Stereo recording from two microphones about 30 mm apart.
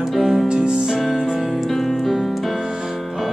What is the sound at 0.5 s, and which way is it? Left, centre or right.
Music, right.